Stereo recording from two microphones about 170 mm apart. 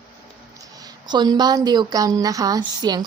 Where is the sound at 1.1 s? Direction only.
25° right (ahead or behind).